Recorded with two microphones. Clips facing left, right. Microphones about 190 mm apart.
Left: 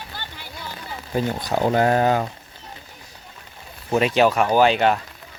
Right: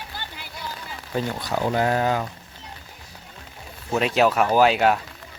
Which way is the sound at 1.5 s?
40° left (ahead or behind).